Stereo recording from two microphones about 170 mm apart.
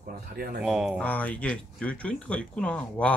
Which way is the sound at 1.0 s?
10° left (ahead or behind).